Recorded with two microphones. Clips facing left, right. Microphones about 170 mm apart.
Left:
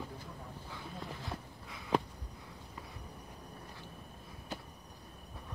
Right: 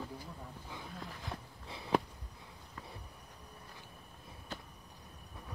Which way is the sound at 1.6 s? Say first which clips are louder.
Right 2 dB; 30° right (ahead or behind).